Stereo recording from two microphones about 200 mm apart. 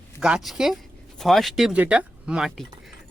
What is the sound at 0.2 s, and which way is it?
Speech, 5° right (ahead or behind).